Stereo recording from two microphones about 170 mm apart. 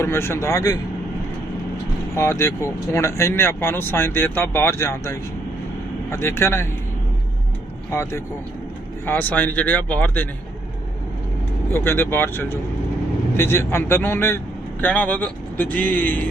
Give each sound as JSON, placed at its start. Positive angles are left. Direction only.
{"t": 0.0, "sound": "speech", "side_deg": 15}
{"t": 2.1, "sound": "speech", "side_deg": 15}
{"t": 7.9, "sound": "speech", "side_deg": 15}
{"t": 11.7, "sound": "speech", "side_deg": 15}